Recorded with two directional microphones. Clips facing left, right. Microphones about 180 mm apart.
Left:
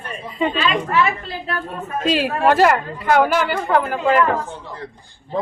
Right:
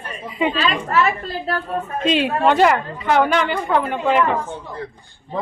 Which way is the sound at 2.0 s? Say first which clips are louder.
Even; 5° left (ahead or behind).